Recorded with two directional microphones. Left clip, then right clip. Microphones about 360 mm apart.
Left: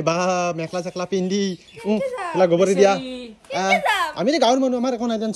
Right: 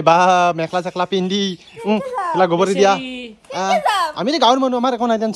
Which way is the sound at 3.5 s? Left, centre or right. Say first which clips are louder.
Right 2 dB; centre.